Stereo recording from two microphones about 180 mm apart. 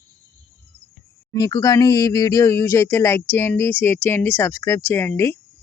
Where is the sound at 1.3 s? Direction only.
20° left (ahead or behind).